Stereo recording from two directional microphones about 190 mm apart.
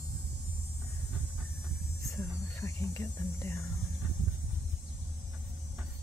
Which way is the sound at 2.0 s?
15° left (ahead or behind).